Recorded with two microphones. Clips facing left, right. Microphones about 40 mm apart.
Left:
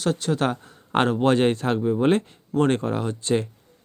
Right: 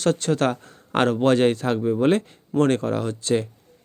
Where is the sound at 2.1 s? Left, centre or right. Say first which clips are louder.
Right 1 dB; left.